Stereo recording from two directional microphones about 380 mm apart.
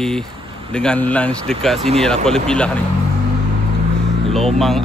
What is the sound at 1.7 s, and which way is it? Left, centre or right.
Speech, centre.